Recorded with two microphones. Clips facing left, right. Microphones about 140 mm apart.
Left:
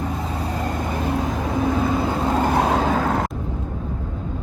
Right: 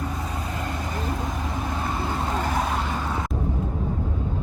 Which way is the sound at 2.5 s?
80° left.